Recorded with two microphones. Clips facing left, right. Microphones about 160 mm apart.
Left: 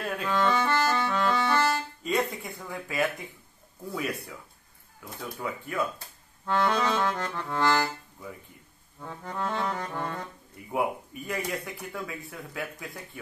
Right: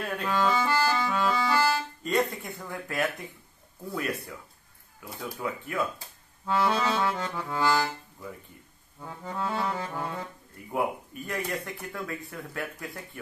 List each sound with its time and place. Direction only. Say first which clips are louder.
0.0 s music: even; centre (ahead or behind)
2.0 s speech: right 1 dB; centre (ahead or behind)
6.4 s accordion: even; 5° right (ahead or behind)
9.0 s speech: even; 5° right (ahead or behind)